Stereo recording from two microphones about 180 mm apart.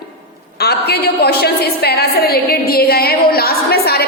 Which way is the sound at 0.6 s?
65° left (ahead or behind).